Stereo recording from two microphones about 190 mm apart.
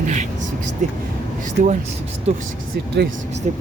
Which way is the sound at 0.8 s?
40° right (ahead or behind).